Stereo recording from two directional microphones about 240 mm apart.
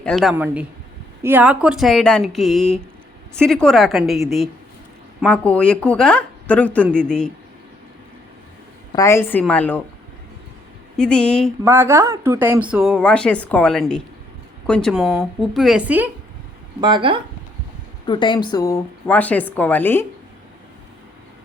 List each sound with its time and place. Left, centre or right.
0.0 s speech: centre
8.9 s a woman's voice: centre
10.9 s speech: centre
11.6 s speech: centre
16.8 s speech: centre
18.0 s a woman's voice: centre